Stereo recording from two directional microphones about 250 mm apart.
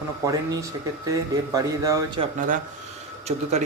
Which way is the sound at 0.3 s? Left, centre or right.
Centre.